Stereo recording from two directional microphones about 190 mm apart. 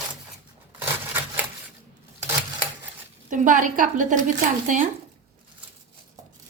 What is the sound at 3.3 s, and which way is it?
Speech, 45° right (ahead or behind).